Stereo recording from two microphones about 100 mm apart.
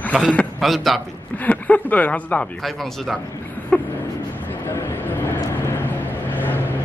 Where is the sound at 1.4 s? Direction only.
15° left (ahead or behind).